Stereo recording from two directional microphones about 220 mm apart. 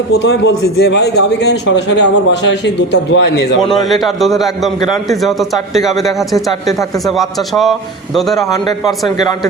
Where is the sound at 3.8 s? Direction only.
Centre (ahead or behind).